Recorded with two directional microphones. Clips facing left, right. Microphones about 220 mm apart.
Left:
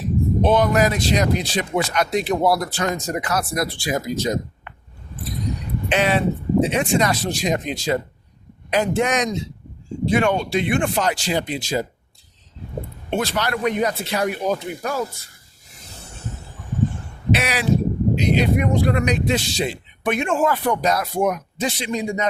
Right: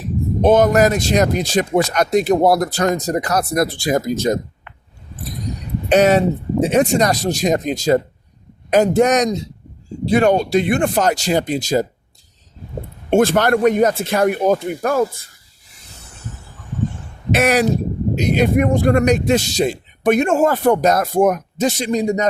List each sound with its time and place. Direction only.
0.4 s a man's voice: 45° right (ahead or behind)
5.9 s a man's voice: 45° right (ahead or behind)
13.1 s a man's voice: 50° right (ahead or behind)
17.3 s a man's voice: 45° right (ahead or behind)